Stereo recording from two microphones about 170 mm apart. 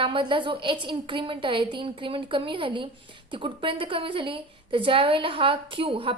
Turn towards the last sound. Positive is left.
turn(degrees=-35)  # may be behind; listen again after turning